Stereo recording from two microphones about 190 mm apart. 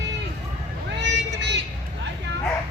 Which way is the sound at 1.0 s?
65° right (ahead or behind).